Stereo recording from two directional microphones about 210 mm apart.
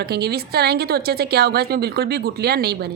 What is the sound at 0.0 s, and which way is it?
A woman's voice, 50° right (ahead or behind).